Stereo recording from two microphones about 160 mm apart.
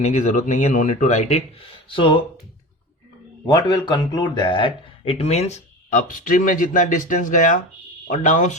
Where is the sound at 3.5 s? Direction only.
25° left (ahead or behind); by 8.6 s 50° left (ahead or behind).